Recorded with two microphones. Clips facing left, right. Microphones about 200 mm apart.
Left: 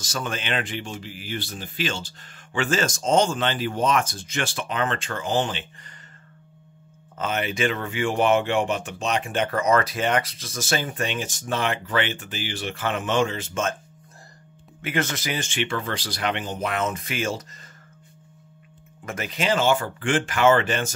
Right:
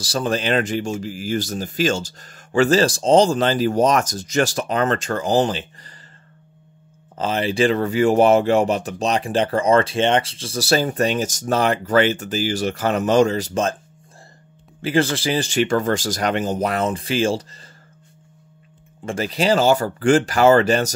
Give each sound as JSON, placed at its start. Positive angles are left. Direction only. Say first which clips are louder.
{"t": 0.0, "sound": "speech", "louder": "right 8 dB", "side_deg": -35}
{"t": 7.2, "sound": "speech", "louder": "right 6 dB", "side_deg": -30}
{"t": 14.8, "sound": "speech", "louder": "right 7 dB", "side_deg": -30}
{"t": 19.0, "sound": "speech", "louder": "right 6 dB", "side_deg": -30}